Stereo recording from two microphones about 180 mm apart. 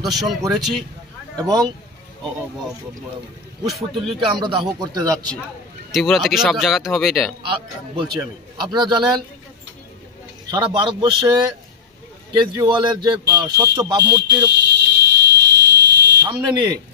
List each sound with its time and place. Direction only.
0.0 s speech: centre (ahead or behind)
1.3 s speech: 20° right (ahead or behind)
4.2 s a man's voice: 30° right (ahead or behind)
5.9 s speech: centre (ahead or behind)
7.4 s a man's voice: 30° right (ahead or behind)
10.5 s a man's voice: 25° right (ahead or behind)
14.7 s fire alarm: 70° right (ahead or behind)
16.3 s a man's voice: 25° right (ahead or behind)